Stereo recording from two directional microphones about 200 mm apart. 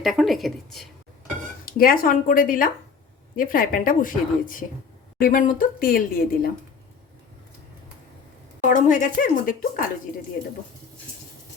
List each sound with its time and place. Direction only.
0.0 s a woman's voice: centre (ahead or behind)
1.6 s speech: 45° left (ahead or behind)
8.6 s speech: 40° left (ahead or behind)